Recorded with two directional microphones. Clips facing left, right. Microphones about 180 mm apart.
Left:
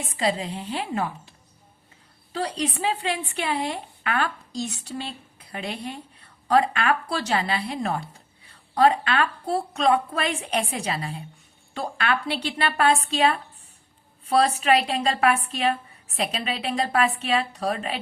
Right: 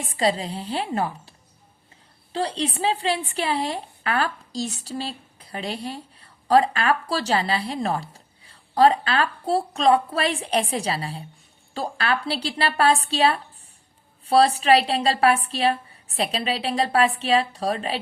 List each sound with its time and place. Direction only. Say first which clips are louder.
0.2 s a woman's voice: right 2 dB; 35° right (ahead or behind)
2.3 s a woman's voice: right 2 dB; 30° right (ahead or behind)